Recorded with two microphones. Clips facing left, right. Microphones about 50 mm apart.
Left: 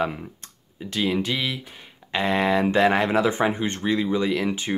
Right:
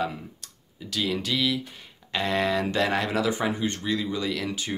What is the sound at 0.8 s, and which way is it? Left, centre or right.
Speech, left.